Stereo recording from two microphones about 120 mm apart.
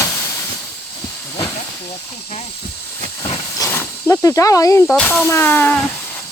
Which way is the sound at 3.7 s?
20° left (ahead or behind).